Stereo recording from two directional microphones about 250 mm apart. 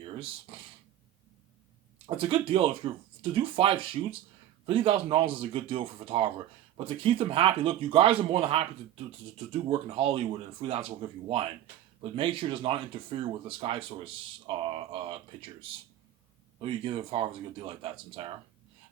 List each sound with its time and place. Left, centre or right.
0.0 s speech: right
2.0 s speech: right